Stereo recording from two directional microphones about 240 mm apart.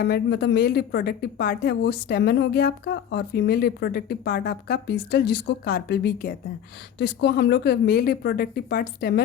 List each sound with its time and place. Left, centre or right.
0.0 s a woman's voice: left